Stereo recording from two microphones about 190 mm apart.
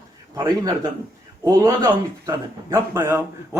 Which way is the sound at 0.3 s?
20° right (ahead or behind).